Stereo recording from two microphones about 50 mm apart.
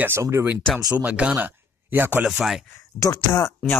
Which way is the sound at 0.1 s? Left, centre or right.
Right.